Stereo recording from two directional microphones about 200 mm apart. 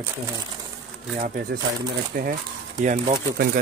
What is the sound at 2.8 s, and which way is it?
Speech, 45° right (ahead or behind).